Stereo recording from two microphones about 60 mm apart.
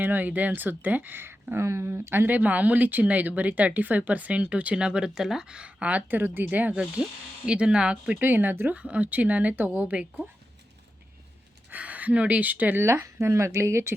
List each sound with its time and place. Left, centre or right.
0.0 s speech: right
6.1 s speech: right
6.7 s speech: centre
8.2 s speech: right
8.7 s speech: right
11.7 s speech: right
12.8 s speech: right